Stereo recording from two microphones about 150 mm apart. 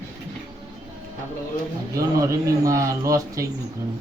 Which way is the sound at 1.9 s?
20° right (ahead or behind).